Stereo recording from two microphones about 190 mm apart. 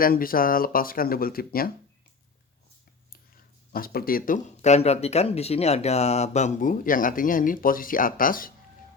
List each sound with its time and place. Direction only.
0.0 s speech: 50° left (ahead or behind)
3.7 s speech: 50° left (ahead or behind)